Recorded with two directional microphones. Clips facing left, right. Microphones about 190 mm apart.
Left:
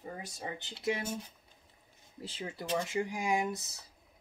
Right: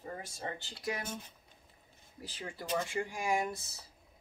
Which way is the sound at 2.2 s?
25° left (ahead or behind).